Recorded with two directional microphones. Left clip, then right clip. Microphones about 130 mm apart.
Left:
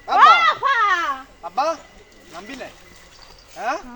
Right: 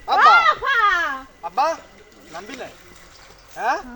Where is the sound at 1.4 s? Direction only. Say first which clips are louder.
Right 2 dB; 35° right (ahead or behind).